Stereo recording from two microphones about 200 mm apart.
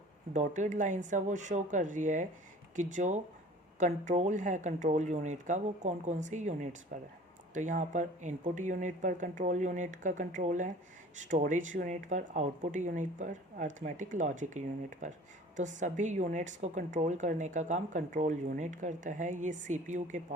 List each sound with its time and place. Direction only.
0.3 s a woman's voice: 40° right (ahead or behind)